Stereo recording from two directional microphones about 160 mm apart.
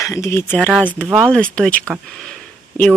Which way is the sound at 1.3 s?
5° left (ahead or behind).